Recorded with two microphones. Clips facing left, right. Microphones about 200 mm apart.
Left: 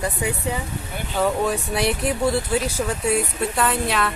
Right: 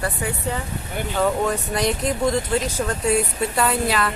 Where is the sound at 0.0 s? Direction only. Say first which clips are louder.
Left 1 dB; 15° left (ahead or behind).